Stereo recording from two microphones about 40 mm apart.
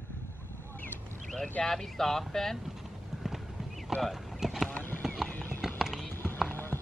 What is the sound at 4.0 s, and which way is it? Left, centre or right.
Clip-clop, centre.